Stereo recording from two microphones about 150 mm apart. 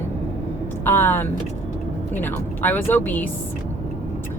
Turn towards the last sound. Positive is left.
turn(degrees=10)  # may be behind; listen again after turning